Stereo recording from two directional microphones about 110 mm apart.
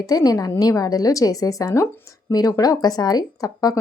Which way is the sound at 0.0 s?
35° left (ahead or behind).